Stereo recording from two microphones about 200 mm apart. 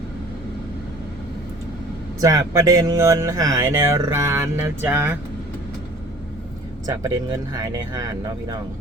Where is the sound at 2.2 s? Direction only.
15° right (ahead or behind).